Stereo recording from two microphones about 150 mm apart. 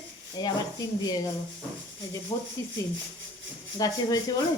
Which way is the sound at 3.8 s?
25° left (ahead or behind).